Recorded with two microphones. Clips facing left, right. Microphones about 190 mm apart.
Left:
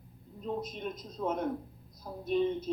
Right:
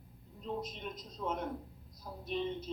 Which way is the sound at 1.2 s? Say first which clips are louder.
Left 5 dB; 50° left (ahead or behind).